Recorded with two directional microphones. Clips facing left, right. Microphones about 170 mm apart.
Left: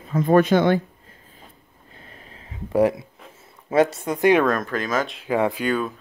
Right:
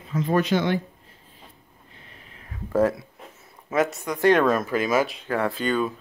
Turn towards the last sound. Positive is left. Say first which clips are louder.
# left 1 dB
turn(degrees=5)  # may be behind; listen again after turning